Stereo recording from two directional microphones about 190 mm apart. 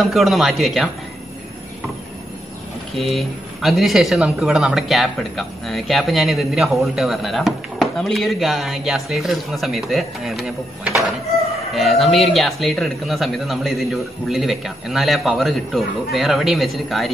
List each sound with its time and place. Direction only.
0.0 s speech: centre (ahead or behind)
3.0 s speech: centre (ahead or behind)